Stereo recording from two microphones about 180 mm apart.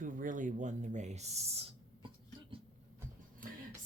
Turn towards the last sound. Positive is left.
turn(degrees=-50)  # may be behind; listen again after turning